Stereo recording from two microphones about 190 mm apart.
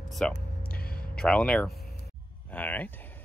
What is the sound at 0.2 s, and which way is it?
Speech, 5° left (ahead or behind).